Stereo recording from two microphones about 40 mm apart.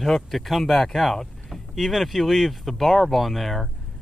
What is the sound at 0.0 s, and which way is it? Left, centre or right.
Speech, centre.